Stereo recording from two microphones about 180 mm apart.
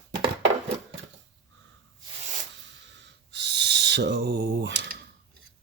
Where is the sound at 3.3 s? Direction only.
75° right (ahead or behind).